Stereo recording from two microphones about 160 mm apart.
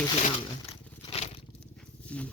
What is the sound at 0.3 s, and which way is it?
Crumpling, 40° left (ahead or behind).